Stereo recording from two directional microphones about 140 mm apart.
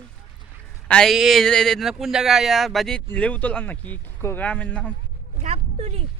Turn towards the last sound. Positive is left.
turn(degrees=-45)  # may be behind; listen again after turning